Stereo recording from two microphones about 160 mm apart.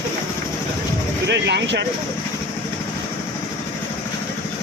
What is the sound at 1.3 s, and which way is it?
Speech, 90° right.